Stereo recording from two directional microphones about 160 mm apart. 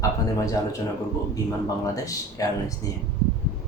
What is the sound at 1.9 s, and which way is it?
Speech, 20° left (ahead or behind).